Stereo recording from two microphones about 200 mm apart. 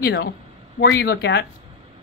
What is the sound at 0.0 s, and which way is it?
Speech, 55° left (ahead or behind).